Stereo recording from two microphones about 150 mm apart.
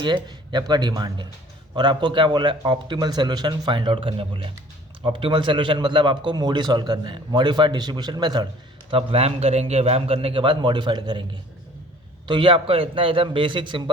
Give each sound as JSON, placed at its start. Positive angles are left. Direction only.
{"t": 0.0, "sound": "a man's voice", "side_deg": -30}
{"t": 12.3, "sound": "a man's voice", "side_deg": -35}